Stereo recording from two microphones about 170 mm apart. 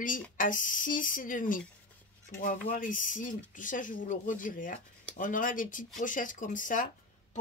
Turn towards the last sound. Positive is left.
turn(degrees=50)  # may be behind; listen again after turning